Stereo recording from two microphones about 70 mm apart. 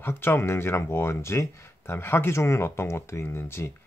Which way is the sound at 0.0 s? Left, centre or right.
Left.